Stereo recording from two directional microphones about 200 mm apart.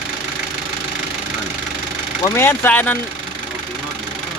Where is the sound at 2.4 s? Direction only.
10° left (ahead or behind).